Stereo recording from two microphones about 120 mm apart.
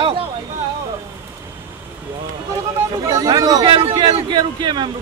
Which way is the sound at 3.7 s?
45° right (ahead or behind).